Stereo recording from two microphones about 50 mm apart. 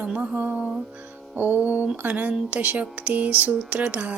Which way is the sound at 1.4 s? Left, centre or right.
Right.